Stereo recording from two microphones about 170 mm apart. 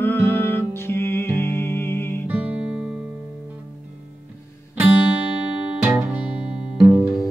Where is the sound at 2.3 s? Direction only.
10° right (ahead or behind).